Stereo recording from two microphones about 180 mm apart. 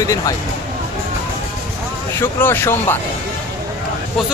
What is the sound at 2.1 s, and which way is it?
Speech, 10° left (ahead or behind).